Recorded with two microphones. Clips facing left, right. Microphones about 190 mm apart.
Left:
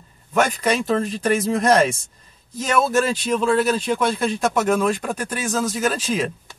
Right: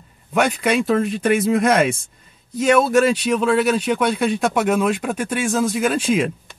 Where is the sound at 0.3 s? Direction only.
5° right (ahead or behind).